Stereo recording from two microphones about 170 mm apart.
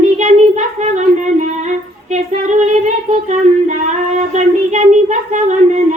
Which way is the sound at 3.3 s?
45° right (ahead or behind).